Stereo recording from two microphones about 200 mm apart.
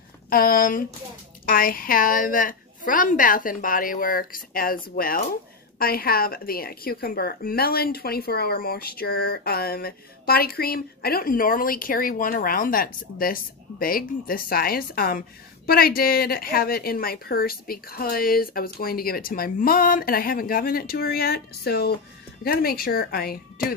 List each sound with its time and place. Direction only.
0.3 s a woman's voice: 45° left (ahead or behind)